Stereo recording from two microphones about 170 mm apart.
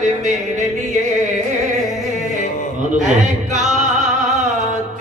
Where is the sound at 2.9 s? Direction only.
Centre (ahead or behind).